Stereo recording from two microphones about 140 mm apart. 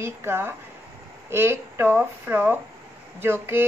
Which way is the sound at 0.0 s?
15° right (ahead or behind).